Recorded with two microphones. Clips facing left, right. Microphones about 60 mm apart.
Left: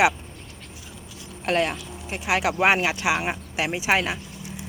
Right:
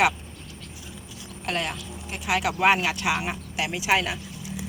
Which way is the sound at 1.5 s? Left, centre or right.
Left.